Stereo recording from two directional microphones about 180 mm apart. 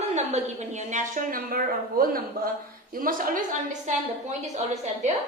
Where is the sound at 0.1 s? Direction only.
40° right (ahead or behind).